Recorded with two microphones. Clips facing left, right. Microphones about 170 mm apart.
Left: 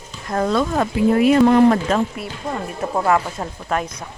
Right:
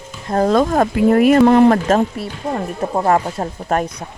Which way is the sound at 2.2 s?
30° right (ahead or behind).